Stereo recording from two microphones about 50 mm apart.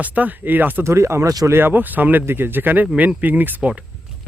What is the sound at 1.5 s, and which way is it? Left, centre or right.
Speech, right.